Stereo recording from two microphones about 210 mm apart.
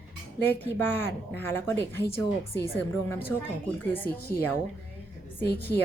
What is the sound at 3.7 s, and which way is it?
Speech, 10° left (ahead or behind).